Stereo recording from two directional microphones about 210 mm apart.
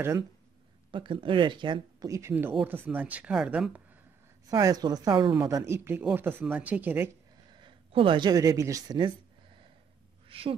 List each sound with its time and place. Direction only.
0.9 s speech: 25° right (ahead or behind); by 3.8 s 5° right (ahead or behind)
4.5 s speech: 15° right (ahead or behind)
7.5 s speech: 25° right (ahead or behind)
10.3 s speech: 25° right (ahead or behind)